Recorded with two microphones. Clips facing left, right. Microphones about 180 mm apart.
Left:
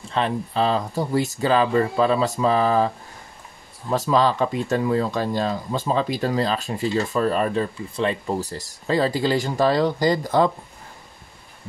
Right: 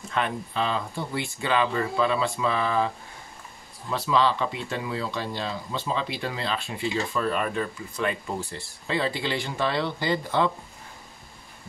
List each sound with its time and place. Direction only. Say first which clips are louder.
0.1 s speech: left 5 dB; 35° left (ahead or behind)
3.9 s speech: left 4 dB; 45° left (ahead or behind)